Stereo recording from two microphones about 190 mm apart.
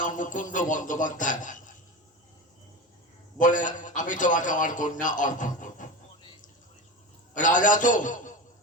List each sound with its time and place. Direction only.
0.0 s a man's voice: 40° left (ahead or behind)
3.3 s a man's voice: 40° left (ahead or behind)
7.3 s a man's voice: 45° left (ahead or behind)